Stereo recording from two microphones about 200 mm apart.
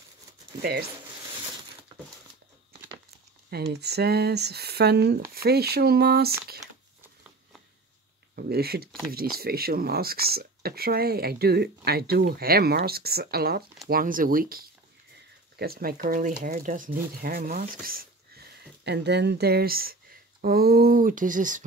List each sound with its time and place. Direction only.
0.6 s speech: 55° right (ahead or behind)
3.4 s speech: 55° right (ahead or behind)
8.4 s speech: 50° right (ahead or behind)